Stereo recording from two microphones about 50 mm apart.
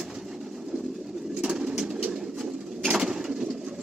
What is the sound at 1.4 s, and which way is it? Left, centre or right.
Bird, centre.